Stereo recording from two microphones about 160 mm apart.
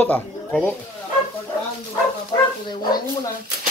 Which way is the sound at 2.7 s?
25° left (ahead or behind).